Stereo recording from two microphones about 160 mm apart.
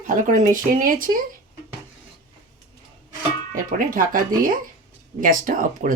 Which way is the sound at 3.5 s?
60° right (ahead or behind).